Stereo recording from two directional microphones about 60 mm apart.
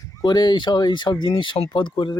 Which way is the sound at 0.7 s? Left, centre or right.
Left.